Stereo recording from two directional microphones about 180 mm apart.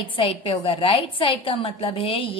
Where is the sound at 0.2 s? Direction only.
30° left (ahead or behind).